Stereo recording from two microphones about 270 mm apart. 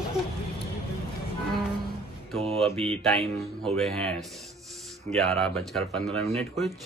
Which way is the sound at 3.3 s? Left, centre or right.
Centre.